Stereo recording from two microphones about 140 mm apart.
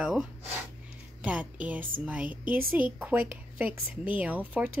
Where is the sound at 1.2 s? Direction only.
10° right (ahead or behind).